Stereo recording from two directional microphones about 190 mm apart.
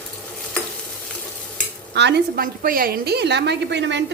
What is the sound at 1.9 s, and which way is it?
A woman's voice, 65° right (ahead or behind).